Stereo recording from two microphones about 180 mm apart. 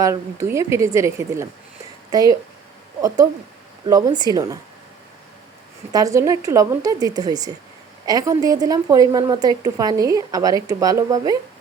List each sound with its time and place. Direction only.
0.0 s speech: 15° right (ahead or behind)
3.8 s a woman's voice: 20° right (ahead or behind)
5.9 s a woman's voice: 20° right (ahead or behind)